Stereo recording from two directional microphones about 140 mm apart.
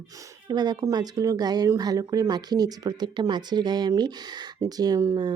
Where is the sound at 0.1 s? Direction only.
25° right (ahead or behind).